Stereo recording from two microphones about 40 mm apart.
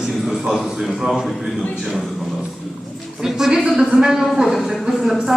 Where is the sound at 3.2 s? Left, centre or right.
Centre.